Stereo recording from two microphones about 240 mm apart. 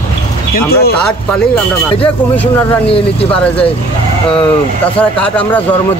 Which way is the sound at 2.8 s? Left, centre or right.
Left.